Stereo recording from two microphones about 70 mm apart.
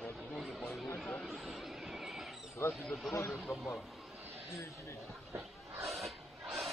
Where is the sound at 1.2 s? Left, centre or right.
Centre.